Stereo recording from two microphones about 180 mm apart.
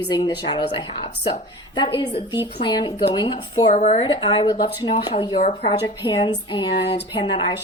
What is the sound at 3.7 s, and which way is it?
Speech, 40° left (ahead or behind).